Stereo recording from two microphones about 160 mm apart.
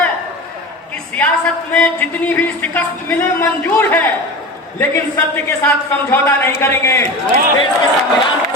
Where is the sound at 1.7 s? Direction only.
10° left (ahead or behind).